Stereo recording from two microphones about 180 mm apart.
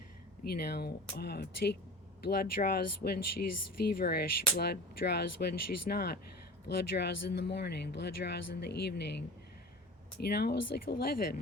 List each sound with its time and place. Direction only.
0.4 s speech: 60° left (ahead or behind)